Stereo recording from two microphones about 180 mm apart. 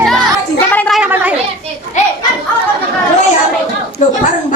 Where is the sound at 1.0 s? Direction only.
10° right (ahead or behind).